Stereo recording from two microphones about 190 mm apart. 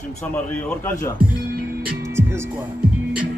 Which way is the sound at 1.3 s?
55° right (ahead or behind).